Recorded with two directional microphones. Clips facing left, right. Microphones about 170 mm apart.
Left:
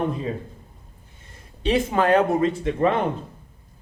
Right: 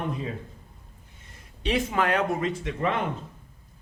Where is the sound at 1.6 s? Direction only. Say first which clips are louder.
Left 5 dB; 30° left (ahead or behind).